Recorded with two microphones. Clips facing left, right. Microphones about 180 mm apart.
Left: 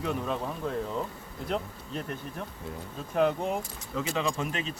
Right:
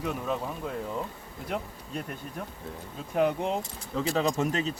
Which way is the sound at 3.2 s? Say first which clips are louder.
Even; 15° right (ahead or behind).